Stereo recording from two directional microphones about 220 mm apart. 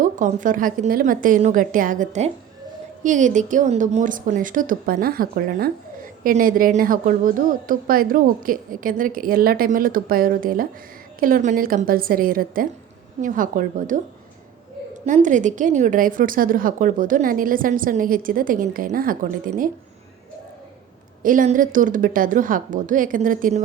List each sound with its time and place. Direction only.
0.0 s a woman's voice: 35° right (ahead or behind)
15.0 s a woman's voice: 35° right (ahead or behind)
21.2 s a woman's voice: 35° right (ahead or behind)